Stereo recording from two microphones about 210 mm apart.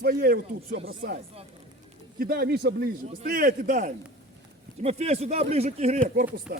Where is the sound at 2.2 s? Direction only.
45° right (ahead or behind).